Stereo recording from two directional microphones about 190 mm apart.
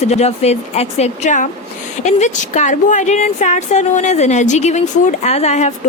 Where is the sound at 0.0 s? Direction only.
35° left (ahead or behind).